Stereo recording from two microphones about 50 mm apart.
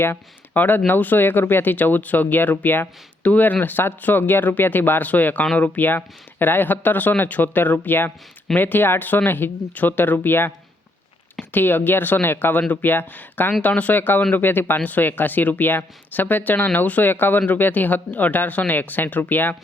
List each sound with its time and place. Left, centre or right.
0.5 s speech: left
11.5 s speech: left